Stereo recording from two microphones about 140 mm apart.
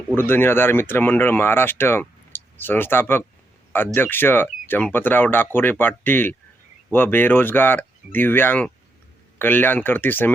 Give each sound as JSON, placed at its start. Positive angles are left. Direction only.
{"t": 0.2, "sound": "speech", "side_deg": 15}